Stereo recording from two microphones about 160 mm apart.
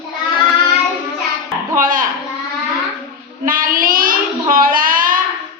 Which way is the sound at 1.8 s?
60° right (ahead or behind).